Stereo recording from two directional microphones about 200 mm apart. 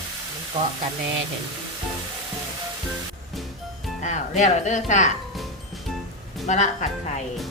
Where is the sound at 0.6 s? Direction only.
25° right (ahead or behind).